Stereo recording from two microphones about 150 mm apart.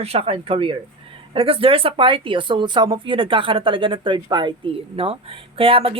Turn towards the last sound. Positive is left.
turn(degrees=-35)  # may be behind; listen again after turning